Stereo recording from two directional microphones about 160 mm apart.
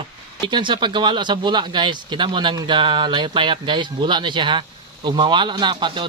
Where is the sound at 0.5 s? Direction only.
30° right (ahead or behind).